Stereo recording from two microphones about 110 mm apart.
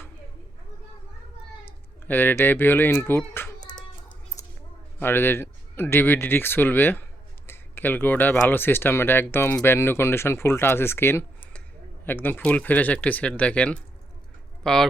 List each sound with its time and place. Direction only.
1.6 s speech: 15° left (ahead or behind)
3.6 s child singing: 40° left (ahead or behind)
4.9 s speech: 20° left (ahead or behind); by 14.8 s 5° left (ahead or behind)